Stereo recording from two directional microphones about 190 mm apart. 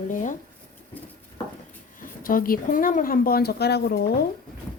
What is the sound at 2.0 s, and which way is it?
Speech, 45° left (ahead or behind).